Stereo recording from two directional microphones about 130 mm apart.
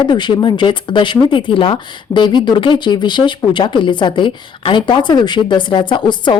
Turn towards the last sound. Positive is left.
turn(degrees=35)  # may be behind; listen again after turning